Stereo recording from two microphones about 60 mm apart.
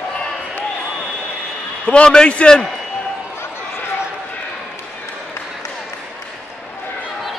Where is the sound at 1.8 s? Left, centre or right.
Centre.